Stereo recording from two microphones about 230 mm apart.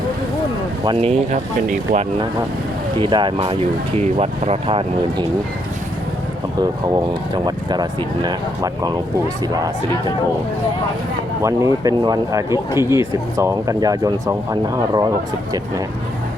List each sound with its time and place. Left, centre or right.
0.9 s speech: right
3.0 s speech: right
6.8 s speech: centre
11.4 s speech: centre